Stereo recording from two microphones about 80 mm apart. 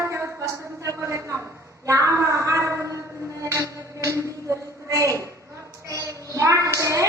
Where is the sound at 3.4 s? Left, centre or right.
Right.